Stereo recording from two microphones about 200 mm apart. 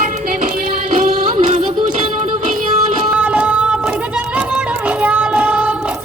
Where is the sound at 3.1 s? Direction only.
5° right (ahead or behind).